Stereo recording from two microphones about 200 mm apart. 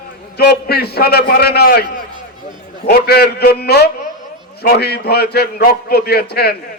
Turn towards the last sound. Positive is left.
turn(degrees=50)  # may be behind; listen again after turning